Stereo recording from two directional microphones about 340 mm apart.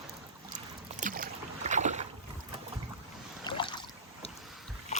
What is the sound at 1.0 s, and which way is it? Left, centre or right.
Boat, right.